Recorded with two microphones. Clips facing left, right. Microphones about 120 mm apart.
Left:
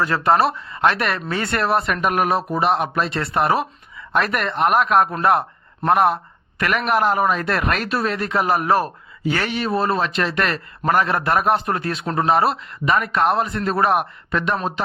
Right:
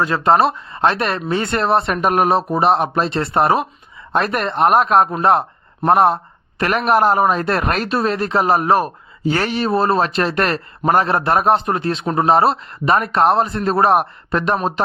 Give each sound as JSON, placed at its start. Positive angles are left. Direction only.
{"t": 0.0, "sound": "a man's voice", "side_deg": -20}